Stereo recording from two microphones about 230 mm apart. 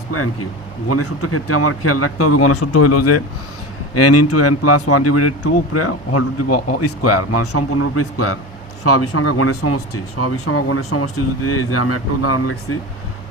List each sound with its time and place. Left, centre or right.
0.1 s a man's voice: left